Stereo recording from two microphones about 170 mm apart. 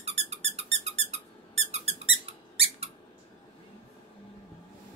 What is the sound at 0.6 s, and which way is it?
Squeak, 40° right (ahead or behind).